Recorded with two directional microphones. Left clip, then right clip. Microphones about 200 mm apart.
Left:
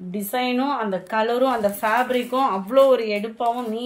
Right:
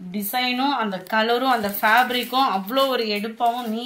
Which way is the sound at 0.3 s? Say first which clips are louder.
Right 1 dB; 55° left (ahead or behind).